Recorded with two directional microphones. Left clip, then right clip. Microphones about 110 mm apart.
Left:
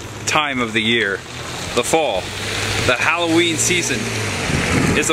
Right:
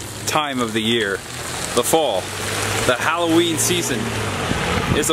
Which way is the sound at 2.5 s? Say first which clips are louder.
Left 1 dB; 40° right (ahead or behind).